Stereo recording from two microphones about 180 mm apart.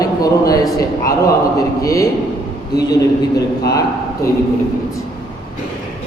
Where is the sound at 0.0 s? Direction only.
20° left (ahead or behind).